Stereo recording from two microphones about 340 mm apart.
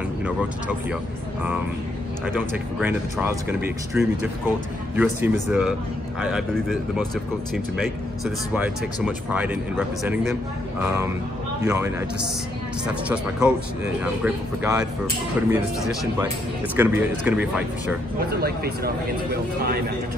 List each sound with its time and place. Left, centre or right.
2.2 s speech: centre
8.2 s a man's voice: centre
18.3 s speech: right